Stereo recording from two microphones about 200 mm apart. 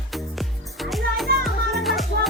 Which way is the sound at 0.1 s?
Centre (ahead or behind).